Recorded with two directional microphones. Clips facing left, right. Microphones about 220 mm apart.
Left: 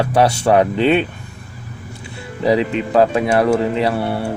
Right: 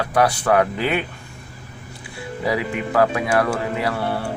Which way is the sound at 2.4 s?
25° left (ahead or behind).